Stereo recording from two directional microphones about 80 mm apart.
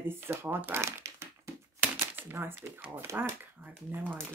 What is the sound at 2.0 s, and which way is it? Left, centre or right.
Typewriter, right.